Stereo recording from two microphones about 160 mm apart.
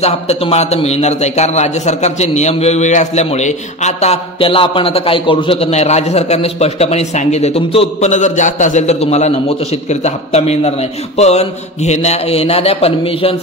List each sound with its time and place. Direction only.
0.0 s a man's voice: 40° left (ahead or behind)